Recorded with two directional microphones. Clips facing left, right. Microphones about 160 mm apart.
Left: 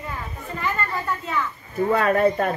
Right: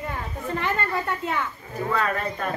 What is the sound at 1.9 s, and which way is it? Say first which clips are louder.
Speech: left 8 dB; 45° left (ahead or behind).